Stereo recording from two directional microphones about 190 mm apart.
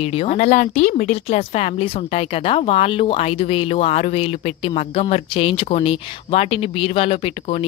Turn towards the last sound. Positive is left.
turn(degrees=30)  # may be behind; listen again after turning